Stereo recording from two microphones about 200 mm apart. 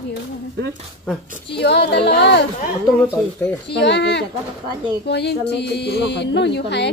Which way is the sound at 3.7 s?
60° left (ahead or behind).